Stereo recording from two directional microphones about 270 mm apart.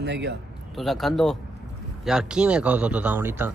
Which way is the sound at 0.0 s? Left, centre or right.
Right.